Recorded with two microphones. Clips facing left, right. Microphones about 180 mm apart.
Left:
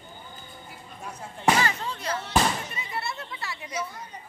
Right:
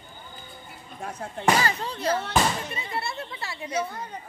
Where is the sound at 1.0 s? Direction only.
60° right (ahead or behind).